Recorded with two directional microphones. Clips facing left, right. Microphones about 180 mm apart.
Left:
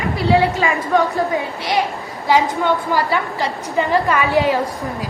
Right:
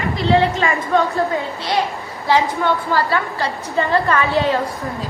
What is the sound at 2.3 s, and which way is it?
A woman's voice, 15° left (ahead or behind).